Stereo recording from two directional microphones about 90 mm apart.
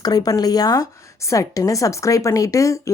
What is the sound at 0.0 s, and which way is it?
A woman's voice, 45° left (ahead or behind).